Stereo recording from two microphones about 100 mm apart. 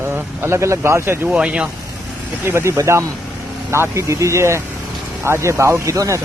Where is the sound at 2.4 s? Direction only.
25° right (ahead or behind).